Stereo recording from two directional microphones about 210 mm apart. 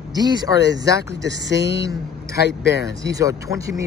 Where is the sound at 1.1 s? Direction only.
55° right (ahead or behind).